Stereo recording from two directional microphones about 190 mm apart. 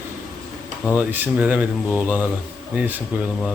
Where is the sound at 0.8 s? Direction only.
10° right (ahead or behind).